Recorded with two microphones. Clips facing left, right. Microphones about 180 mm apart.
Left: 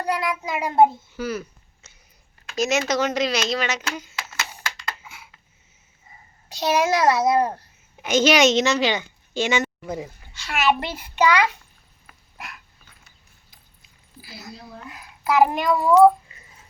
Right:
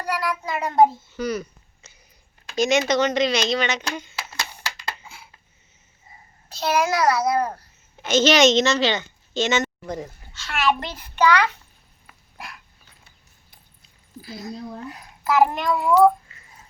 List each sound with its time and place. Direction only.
0.0 s a child's voice: 25° left (ahead or behind)
1.1 s a sound: 5° left (ahead or behind)
2.5 s a child's voice: 5° left (ahead or behind)
6.5 s a child's voice: 20° left (ahead or behind)
8.0 s a woman's voice: 10° left (ahead or behind)
12.0 s dog: 30° right (ahead or behind)
14.2 s a woman's voice: 5° left (ahead or behind)
14.7 s a woman's voice: 35° right (ahead or behind)
15.2 s a child's voice: centre (ahead or behind)